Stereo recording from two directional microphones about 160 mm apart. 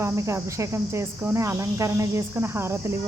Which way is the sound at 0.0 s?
15° right (ahead or behind).